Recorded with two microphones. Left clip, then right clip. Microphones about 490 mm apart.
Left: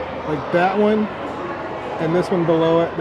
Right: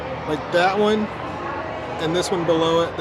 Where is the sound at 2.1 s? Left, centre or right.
Centre.